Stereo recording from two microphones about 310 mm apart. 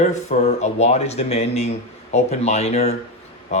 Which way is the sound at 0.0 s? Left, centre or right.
Left.